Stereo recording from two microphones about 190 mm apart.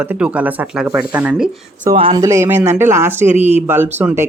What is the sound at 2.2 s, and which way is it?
Speech, 15° right (ahead or behind).